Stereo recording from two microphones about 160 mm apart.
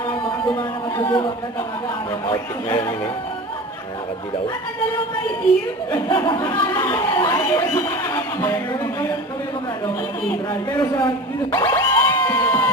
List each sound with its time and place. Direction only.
0.5 s a sound: 15° left (ahead or behind)
2.3 s speech: 15° left (ahead or behind)
5.9 s speech: 25° left (ahead or behind)
10.5 s speech: 25° left (ahead or behind)
11.5 s music: 15° left (ahead or behind)